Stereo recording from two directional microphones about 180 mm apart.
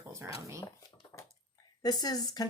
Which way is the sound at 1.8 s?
20° left (ahead or behind).